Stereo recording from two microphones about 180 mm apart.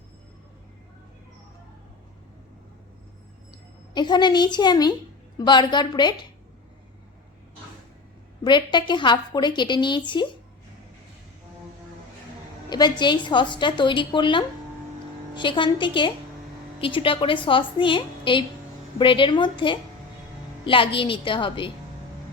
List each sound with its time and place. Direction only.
3.9 s a woman's voice: 25° left (ahead or behind)
8.4 s a woman's voice: 25° left (ahead or behind)
12.7 s a woman's voice: 25° left (ahead or behind)